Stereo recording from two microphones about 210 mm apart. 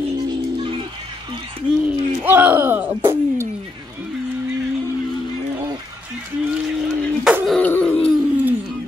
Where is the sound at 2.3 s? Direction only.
10° right (ahead or behind).